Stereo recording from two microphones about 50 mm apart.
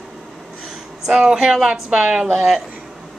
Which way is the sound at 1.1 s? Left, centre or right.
Centre.